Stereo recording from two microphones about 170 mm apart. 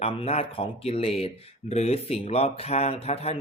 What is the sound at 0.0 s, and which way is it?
Speech, 35° left (ahead or behind).